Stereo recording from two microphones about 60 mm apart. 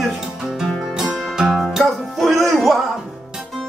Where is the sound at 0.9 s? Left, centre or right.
Centre.